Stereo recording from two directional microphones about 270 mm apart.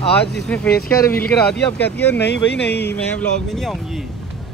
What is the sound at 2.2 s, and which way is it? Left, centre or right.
Speech, left.